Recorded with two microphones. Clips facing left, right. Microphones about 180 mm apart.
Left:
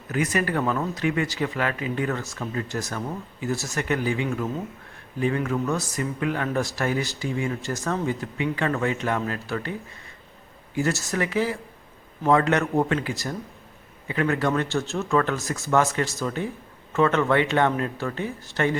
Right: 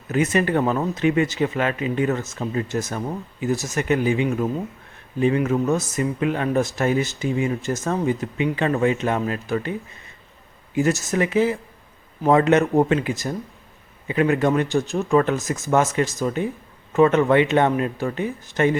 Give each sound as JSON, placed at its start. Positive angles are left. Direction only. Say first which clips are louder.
{"t": 0.1, "sound": "speech", "louder": "right 5 dB", "side_deg": -25}
{"t": 10.8, "sound": "speech", "louder": "right 5 dB", "side_deg": -20}